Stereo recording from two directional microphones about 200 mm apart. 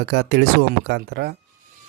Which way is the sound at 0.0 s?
55° right (ahead or behind).